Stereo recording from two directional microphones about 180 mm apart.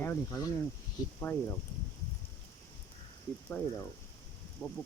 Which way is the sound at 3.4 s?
10° left (ahead or behind).